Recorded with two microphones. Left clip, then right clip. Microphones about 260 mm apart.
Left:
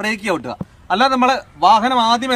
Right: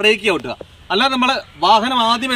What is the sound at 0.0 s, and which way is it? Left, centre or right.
A man's voice, centre.